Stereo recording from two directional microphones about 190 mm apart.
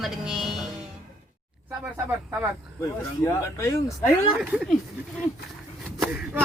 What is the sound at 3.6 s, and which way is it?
Speech, 15° left (ahead or behind).